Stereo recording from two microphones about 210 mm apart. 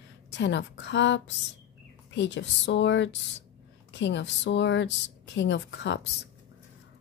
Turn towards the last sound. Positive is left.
turn(degrees=55)  # may be behind; listen again after turning